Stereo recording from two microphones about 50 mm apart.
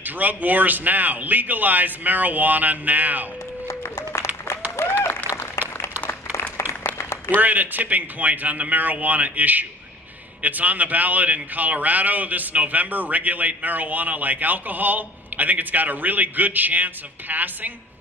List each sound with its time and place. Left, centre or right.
0.0 s speech: right
3.6 s a sound: left
4.5 s applause: left
7.3 s speech: right